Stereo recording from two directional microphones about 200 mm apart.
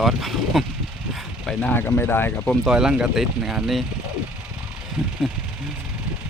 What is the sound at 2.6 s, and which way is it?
Speech, 5° right (ahead or behind).